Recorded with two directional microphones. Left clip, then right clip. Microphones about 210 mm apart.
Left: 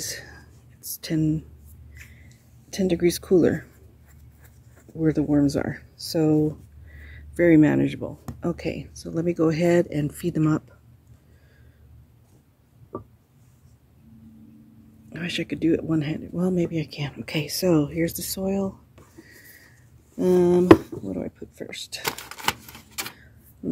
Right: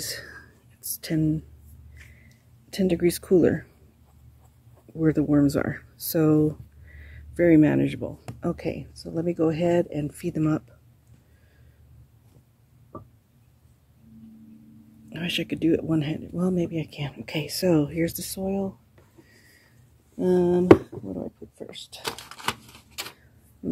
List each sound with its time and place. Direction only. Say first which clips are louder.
0.0 s speech: even; centre (ahead or behind)
4.9 s speech: even; centre (ahead or behind); by 10.6 s 15° left (ahead or behind)
15.1 s speech: right 1 dB; centre (ahead or behind)
18.3 s speech: left 2 dB; 15° left (ahead or behind)
20.2 s speech: left 3 dB; 15° left (ahead or behind)
22.0 s typewriter: left 3 dB; 30° left (ahead or behind)